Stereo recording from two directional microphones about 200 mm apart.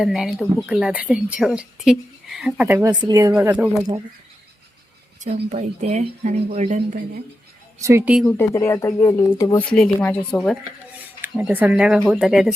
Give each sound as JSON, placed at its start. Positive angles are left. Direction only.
{"t": 0.0, "sound": "speech", "side_deg": 0}
{"t": 5.2, "sound": "speech", "side_deg": -35}
{"t": 7.8, "sound": "speech", "side_deg": -15}
{"t": 8.4, "sound": "speech", "side_deg": 15}
{"t": 9.6, "sound": "speech", "side_deg": 5}
{"t": 11.2, "sound": "speech", "side_deg": -10}